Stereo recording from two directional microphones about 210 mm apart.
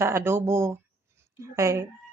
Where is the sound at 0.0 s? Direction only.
10° right (ahead or behind).